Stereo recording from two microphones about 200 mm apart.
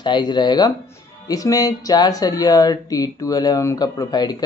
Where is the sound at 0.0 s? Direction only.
20° left (ahead or behind).